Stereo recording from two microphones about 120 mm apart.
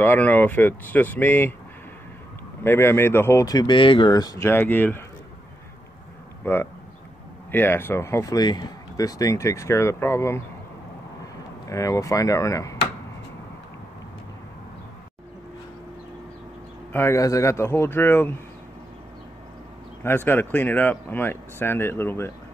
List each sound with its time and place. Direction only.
0.0 s speech: 15° left (ahead or behind)
2.6 s speech: 20° left (ahead or behind)
4.5 s speech: 15° left (ahead or behind)
6.4 s speech: 15° left (ahead or behind)
11.7 s speech: 25° left (ahead or behind)
16.9 s speech: 20° left (ahead or behind)
20.0 s speech: 20° left (ahead or behind)